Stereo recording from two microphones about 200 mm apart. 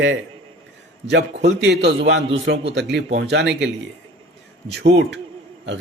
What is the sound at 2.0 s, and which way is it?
A man's voice, 60° right (ahead or behind).